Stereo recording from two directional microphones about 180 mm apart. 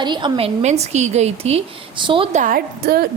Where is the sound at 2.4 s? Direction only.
55° right (ahead or behind).